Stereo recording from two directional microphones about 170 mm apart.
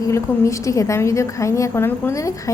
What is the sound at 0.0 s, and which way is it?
A woman's voice, 20° left (ahead or behind).